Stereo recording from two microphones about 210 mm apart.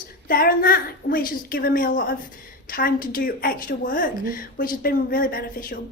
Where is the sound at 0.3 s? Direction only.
45° left (ahead or behind).